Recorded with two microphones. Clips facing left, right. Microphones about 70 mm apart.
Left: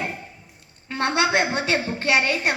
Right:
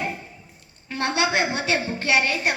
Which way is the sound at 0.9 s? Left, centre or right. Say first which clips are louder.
Left 2 dB; left.